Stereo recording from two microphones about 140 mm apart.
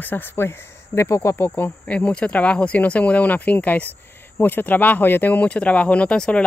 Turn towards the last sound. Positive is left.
turn(degrees=5)  # may be behind; listen again after turning